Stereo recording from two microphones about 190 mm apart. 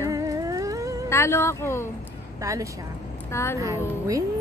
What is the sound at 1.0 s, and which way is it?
Speech, 15° left (ahead or behind).